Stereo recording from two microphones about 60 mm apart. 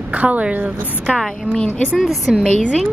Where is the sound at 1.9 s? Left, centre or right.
Centre.